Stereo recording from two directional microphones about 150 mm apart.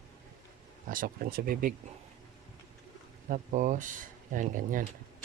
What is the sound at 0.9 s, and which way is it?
Speech, 75° right (ahead or behind).